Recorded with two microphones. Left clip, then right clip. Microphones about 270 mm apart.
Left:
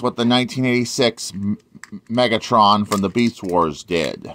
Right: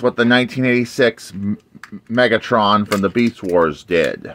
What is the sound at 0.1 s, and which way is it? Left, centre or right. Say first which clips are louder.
Speech: right 4 dB; centre.